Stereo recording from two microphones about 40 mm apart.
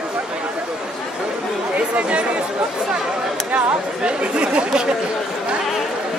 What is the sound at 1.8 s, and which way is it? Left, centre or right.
Chatter, right.